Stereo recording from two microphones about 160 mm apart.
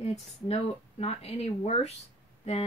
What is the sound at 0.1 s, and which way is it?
Speech, 40° left (ahead or behind).